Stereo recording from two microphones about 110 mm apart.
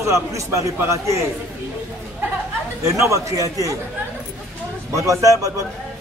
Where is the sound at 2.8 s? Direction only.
25° right (ahead or behind).